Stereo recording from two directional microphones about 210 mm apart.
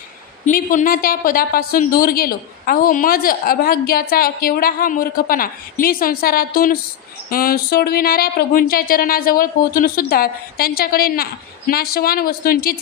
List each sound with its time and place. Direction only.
0.5 s a woman's voice: 40° left (ahead or behind)